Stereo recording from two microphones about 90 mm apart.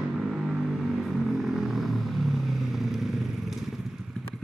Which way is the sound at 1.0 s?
Centre (ahead or behind).